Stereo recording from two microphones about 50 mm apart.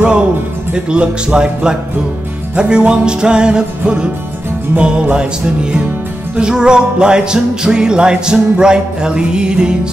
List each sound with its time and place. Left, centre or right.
0.7 s music: centre